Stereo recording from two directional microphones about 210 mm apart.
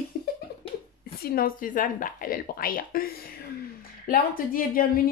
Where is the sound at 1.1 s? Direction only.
45° left (ahead or behind).